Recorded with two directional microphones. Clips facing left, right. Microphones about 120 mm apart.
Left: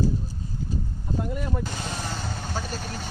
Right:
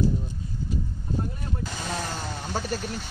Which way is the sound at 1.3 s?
80° left.